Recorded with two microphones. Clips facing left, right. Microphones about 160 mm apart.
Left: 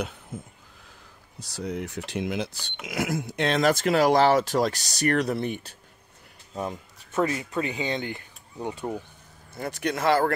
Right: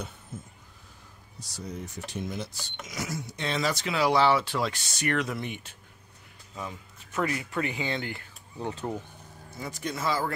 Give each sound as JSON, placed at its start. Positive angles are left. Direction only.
{"t": 1.6, "sound": "speech", "side_deg": 70}
{"t": 2.9, "sound": "speech", "side_deg": 55}
{"t": 7.1, "sound": "speech", "side_deg": 25}
{"t": 9.6, "sound": "speech", "side_deg": 65}